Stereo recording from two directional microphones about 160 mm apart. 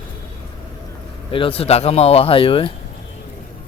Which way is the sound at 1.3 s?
35° left (ahead or behind).